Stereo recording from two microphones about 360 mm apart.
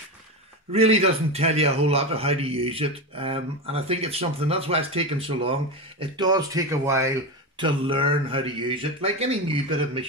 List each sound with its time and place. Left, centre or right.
0.7 s a man's voice: centre